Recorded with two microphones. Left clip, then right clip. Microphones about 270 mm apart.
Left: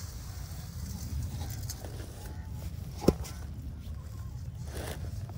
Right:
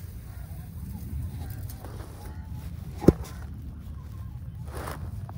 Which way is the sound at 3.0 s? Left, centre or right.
Right.